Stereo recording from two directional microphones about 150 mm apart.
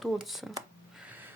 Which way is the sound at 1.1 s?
10° right (ahead or behind).